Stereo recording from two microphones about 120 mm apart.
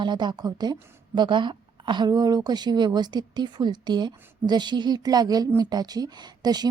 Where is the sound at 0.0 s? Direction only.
40° right (ahead or behind).